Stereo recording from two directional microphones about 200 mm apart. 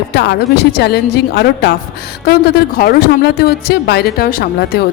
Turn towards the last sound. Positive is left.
turn(degrees=50)  # may be behind; listen again after turning